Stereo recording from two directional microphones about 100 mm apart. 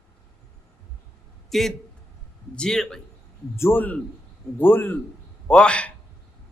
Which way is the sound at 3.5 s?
25° left (ahead or behind).